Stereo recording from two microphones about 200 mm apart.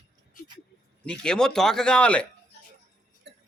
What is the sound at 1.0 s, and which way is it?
A man's voice, 5° left (ahead or behind).